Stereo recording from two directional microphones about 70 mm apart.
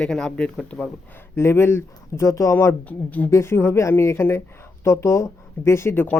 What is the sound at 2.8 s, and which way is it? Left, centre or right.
Speech, left.